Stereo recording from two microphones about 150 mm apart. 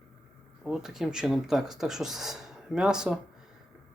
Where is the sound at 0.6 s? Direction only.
5° right (ahead or behind).